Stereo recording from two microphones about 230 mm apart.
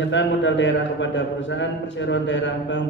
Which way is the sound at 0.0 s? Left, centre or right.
Left.